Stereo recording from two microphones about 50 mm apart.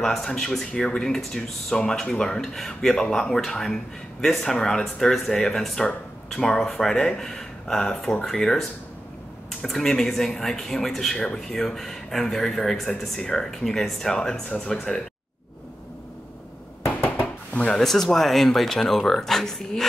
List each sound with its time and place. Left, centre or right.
0.0 s speech: centre
17.0 s knock: left
17.7 s speech: centre